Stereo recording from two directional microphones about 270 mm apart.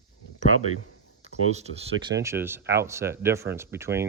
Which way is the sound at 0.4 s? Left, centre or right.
Right.